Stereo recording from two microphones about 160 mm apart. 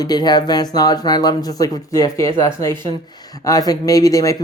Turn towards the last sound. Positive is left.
turn(degrees=20)  # may be behind; listen again after turning